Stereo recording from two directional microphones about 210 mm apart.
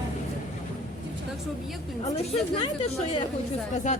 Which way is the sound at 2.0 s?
25° left (ahead or behind).